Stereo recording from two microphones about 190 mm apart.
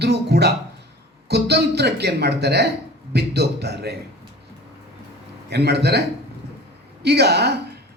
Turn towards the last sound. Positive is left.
turn(degrees=-60)  # may be behind; listen again after turning